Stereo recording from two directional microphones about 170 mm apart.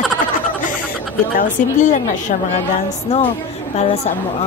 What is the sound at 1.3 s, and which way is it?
A woman's voice, 50° left (ahead or behind).